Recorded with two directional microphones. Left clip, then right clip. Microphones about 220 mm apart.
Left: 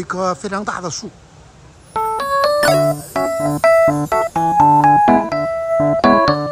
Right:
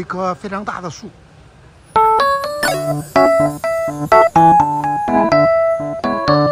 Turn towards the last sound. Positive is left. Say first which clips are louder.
# left 2 dB
turn(degrees=0)  # may be behind; listen again after turning